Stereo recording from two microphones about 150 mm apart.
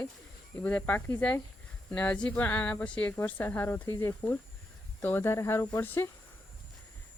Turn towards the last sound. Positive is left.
turn(degrees=15)  # may be behind; listen again after turning